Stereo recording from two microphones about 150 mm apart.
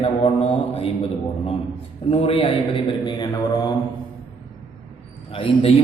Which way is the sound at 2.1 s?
40° left (ahead or behind).